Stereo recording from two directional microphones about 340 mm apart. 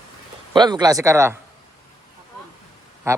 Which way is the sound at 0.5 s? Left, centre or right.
Centre.